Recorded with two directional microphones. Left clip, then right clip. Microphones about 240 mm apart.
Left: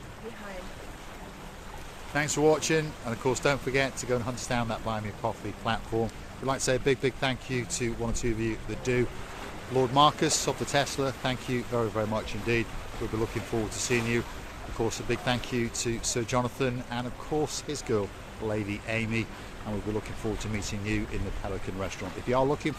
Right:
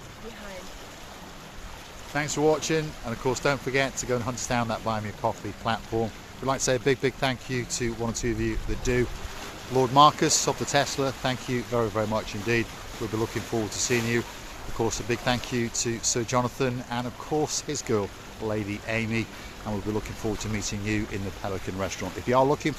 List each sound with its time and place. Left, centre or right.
2.1 s speech: centre
13.7 s speech: right
20.2 s speech: right